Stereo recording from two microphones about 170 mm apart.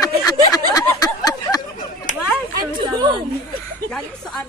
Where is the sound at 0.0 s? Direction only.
20° left (ahead or behind).